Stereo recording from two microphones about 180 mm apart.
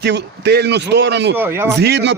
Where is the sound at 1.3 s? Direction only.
10° right (ahead or behind).